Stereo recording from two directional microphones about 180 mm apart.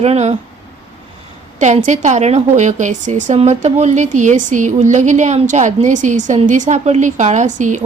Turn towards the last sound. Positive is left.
turn(degrees=-40)  # may be behind; listen again after turning